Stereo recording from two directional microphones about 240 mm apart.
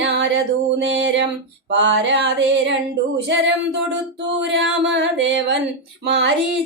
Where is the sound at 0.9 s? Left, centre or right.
Right.